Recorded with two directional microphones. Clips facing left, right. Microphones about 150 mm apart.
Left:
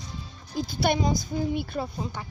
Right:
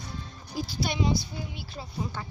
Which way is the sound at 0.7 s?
55° left (ahead or behind).